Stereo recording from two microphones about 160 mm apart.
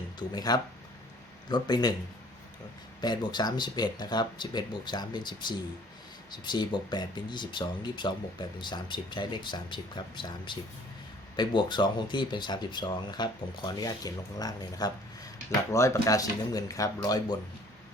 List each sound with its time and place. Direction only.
0.2 s speech: 25° left (ahead or behind)
3.0 s speech: 25° left (ahead or behind)